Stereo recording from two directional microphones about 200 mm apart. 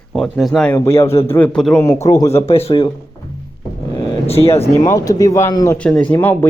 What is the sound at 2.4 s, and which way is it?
Speech, 30° left (ahead or behind).